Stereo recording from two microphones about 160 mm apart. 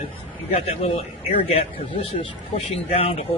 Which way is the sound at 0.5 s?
40° left (ahead or behind).